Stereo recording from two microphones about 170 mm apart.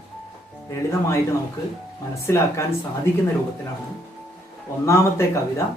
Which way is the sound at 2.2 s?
15° left (ahead or behind).